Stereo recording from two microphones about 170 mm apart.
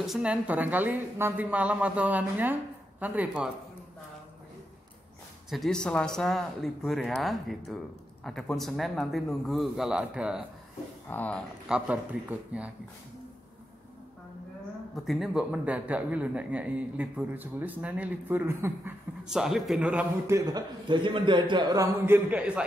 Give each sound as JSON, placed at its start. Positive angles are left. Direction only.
{"t": 0.0, "sound": "a man's voice", "side_deg": -5}
{"t": 5.5, "sound": "speech", "side_deg": 0}
{"t": 11.1, "sound": "speech", "side_deg": 10}
{"t": 11.6, "sound": "a man's voice", "side_deg": -5}
{"t": 15.0, "sound": "a man's voice", "side_deg": 0}